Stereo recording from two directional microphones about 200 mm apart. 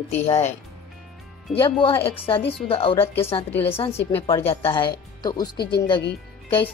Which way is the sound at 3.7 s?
30° left (ahead or behind).